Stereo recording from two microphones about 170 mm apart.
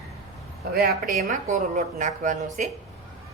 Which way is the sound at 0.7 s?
65° right (ahead or behind).